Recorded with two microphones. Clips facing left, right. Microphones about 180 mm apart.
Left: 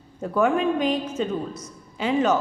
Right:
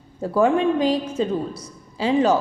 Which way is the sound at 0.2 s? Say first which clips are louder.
Right 3 dB; 30° right (ahead or behind).